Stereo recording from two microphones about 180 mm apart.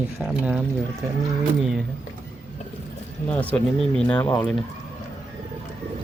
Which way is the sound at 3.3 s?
10° left (ahead or behind).